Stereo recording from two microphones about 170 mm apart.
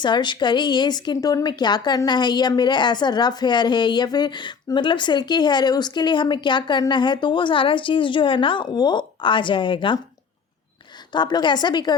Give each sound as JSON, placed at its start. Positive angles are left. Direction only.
{"t": 0.0, "sound": "speech", "side_deg": 25}
{"t": 11.1, "sound": "speech", "side_deg": 25}